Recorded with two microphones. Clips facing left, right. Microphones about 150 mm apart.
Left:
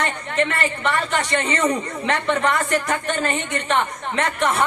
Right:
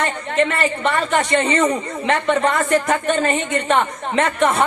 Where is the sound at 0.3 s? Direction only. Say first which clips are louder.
Right 4 dB; 25° right (ahead or behind).